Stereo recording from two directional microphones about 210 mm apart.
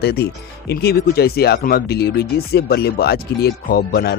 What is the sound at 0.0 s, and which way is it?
Speech, 50° left (ahead or behind).